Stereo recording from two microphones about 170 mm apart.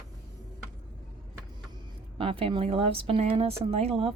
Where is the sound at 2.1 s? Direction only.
30° right (ahead or behind).